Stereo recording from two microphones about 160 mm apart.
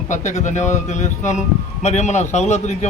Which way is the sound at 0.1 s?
50° left (ahead or behind).